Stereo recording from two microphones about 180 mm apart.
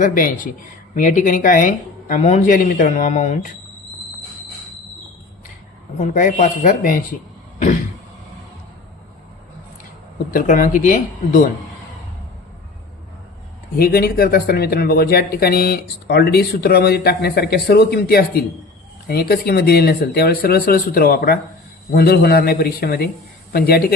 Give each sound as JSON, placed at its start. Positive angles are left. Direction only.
{"t": 0.0, "sound": "speech", "side_deg": 50}
{"t": 6.0, "sound": "speech", "side_deg": 45}
{"t": 10.3, "sound": "speech", "side_deg": 50}
{"t": 13.7, "sound": "speech", "side_deg": 55}